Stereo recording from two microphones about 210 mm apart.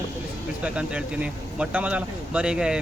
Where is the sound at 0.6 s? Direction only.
5° right (ahead or behind).